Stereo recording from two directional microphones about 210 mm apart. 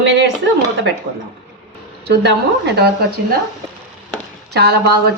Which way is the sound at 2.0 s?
55° right (ahead or behind).